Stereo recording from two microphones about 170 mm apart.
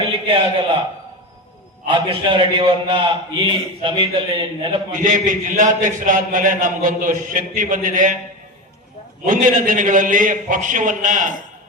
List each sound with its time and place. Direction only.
0.0 s a sound: 35° right (ahead or behind)
1.9 s a man's voice: 30° right (ahead or behind)
4.9 s a man's voice: 50° right (ahead or behind)
9.2 s a man's voice: 50° right (ahead or behind)